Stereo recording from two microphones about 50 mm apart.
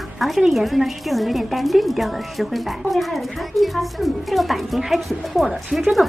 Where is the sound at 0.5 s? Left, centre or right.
Centre.